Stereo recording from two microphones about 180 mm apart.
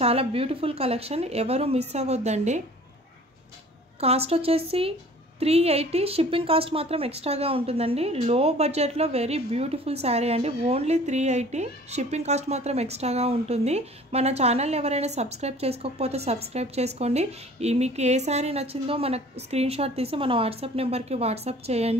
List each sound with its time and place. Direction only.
0.0 s speech: 35° right (ahead or behind)
4.0 s speech: 35° right (ahead or behind)